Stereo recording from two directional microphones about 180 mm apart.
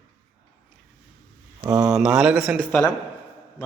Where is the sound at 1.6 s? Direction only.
20° right (ahead or behind).